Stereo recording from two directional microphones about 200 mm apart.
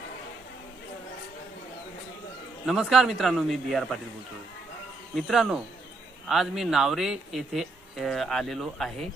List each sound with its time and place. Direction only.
2.6 s speech: centre (ahead or behind)
5.1 s speech: centre (ahead or behind)